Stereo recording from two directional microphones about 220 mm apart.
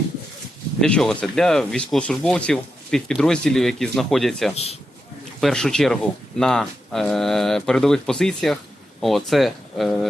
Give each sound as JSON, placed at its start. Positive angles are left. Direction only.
{"t": 0.8, "sound": "speech", "side_deg": 5}
{"t": 4.5, "sound": "a man's voice", "side_deg": 30}
{"t": 5.4, "sound": "speech", "side_deg": 0}